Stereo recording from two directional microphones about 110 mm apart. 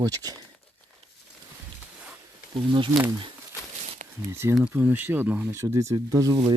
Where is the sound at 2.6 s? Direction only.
50° right (ahead or behind).